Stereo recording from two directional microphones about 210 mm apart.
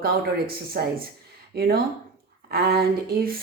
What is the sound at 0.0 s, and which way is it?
A woman's voice, 45° right (ahead or behind).